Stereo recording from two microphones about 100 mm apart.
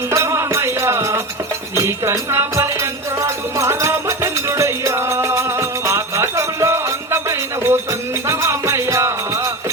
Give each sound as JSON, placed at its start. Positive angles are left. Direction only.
{"t": 0.1, "sound": "music", "side_deg": -30}